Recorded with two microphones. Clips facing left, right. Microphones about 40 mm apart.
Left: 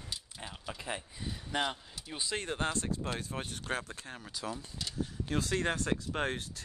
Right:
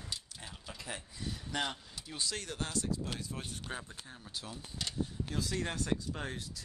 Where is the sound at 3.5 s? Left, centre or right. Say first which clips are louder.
Left 6 dB; left.